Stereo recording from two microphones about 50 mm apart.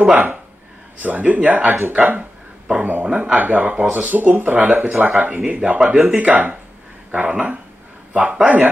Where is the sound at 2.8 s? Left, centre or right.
Right.